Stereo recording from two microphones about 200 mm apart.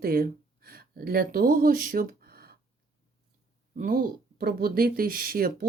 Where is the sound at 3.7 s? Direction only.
45° right (ahead or behind).